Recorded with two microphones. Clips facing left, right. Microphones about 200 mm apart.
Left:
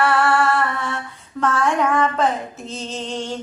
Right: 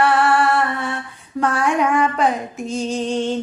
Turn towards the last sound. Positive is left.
turn(degrees=-15)  # may be behind; listen again after turning